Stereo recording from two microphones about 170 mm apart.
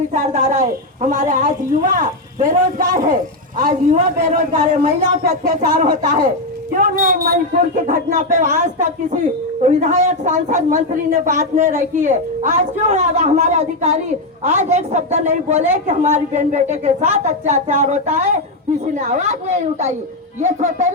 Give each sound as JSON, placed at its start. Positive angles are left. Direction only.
{"t": 0.1, "sound": "a woman's voice", "side_deg": -50}
{"t": 7.9, "sound": "a woman's voice", "side_deg": -45}